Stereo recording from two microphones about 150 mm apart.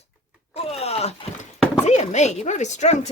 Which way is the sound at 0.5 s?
45° left (ahead or behind).